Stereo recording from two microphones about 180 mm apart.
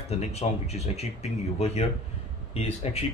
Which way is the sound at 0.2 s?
35° left (ahead or behind).